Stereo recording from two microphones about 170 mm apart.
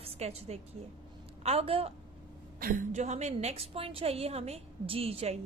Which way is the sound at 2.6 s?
55° right (ahead or behind).